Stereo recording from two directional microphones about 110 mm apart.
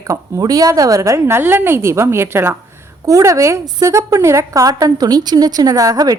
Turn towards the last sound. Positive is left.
turn(degrees=-35)  # may be behind; listen again after turning